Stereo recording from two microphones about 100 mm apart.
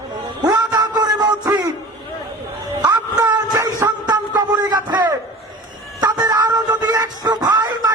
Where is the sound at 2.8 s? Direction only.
40° right (ahead or behind).